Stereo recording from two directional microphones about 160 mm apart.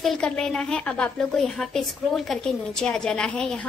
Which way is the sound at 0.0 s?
Centre (ahead or behind).